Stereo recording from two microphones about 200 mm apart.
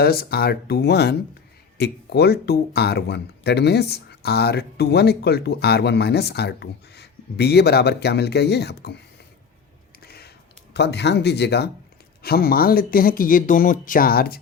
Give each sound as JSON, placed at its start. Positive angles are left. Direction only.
{"t": 0.0, "sound": "speech", "side_deg": 50}
{"t": 10.0, "sound": "a sound", "side_deg": 50}
{"t": 10.8, "sound": "speech", "side_deg": 60}